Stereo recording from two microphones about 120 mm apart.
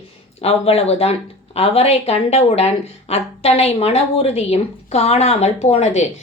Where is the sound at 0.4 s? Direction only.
55° left (ahead or behind).